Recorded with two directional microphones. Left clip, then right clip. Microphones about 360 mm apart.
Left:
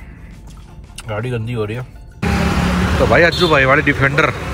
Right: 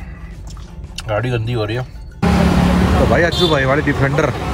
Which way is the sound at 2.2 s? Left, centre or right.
Right.